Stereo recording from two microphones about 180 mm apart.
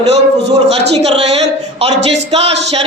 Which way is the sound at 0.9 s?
35° right (ahead or behind).